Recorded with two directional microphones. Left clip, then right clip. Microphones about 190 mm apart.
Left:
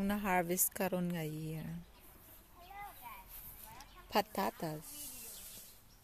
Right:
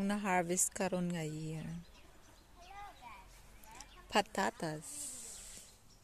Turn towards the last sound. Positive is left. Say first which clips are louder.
# right 1 dB
turn(degrees=0)  # may be behind; listen again after turning